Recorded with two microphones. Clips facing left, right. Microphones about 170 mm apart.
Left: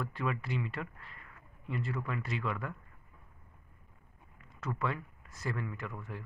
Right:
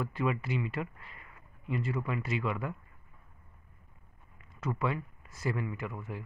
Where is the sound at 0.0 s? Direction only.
5° right (ahead or behind).